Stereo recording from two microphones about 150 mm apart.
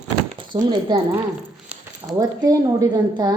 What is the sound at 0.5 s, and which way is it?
Speech, 30° right (ahead or behind).